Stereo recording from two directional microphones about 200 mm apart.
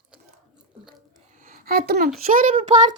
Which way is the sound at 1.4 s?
45° right (ahead or behind).